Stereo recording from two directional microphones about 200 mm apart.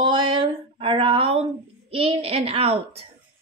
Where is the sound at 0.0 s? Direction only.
25° right (ahead or behind).